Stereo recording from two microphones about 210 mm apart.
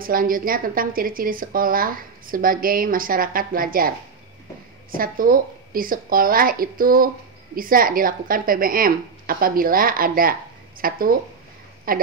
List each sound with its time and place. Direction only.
0.0 s a woman's voice: 40° right (ahead or behind)
4.9 s a woman's voice: 40° right (ahead or behind)